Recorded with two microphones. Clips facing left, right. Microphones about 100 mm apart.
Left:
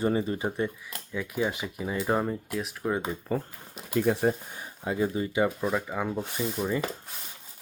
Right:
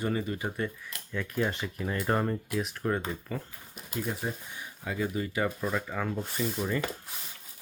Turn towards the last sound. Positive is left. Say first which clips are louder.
# left 2 dB
turn(degrees=10)  # may be behind; listen again after turning